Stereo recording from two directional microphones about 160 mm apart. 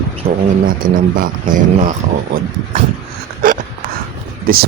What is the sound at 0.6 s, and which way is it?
Speech, 60° right (ahead or behind).